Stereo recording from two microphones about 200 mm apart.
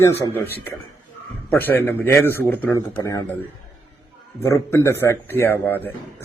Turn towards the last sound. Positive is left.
turn(degrees=10)  # may be behind; listen again after turning